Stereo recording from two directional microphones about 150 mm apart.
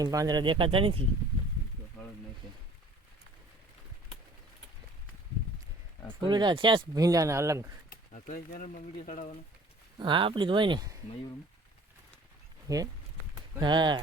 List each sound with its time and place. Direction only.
0.0 s speech: 25° right (ahead or behind)
6.2 s speech: 30° right (ahead or behind)
7.9 s speech: 65° left (ahead or behind)
10.0 s speech: 35° right (ahead or behind)
12.6 s speech: 25° right (ahead or behind)